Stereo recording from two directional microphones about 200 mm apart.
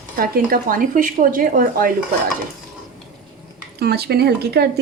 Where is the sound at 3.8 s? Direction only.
55° right (ahead or behind).